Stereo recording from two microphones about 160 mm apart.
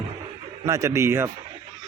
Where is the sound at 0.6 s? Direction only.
20° right (ahead or behind).